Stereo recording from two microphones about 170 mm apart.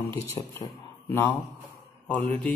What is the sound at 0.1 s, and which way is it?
Speech, 15° left (ahead or behind).